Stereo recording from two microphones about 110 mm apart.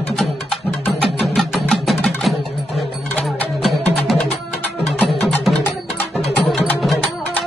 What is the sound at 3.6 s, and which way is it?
Music, centre (ahead or behind).